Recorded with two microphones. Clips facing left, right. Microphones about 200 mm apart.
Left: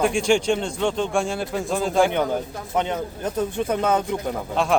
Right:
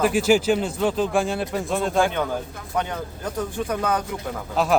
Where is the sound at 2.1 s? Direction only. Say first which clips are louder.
Left 3 dB; 20° left (ahead or behind).